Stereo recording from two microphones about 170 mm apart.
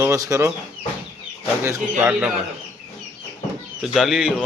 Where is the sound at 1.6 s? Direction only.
15° right (ahead or behind).